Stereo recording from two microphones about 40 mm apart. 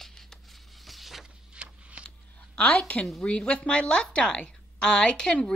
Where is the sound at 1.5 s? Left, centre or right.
Right.